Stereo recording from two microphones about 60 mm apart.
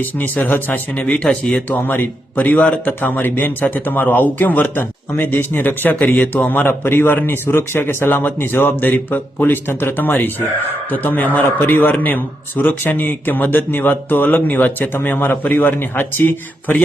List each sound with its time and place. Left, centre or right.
0.4 s a man's voice: left
1.1 s speech: centre
1.7 s a man's voice: left